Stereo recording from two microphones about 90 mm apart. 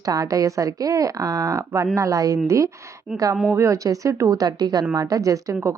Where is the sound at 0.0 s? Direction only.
45° right (ahead or behind).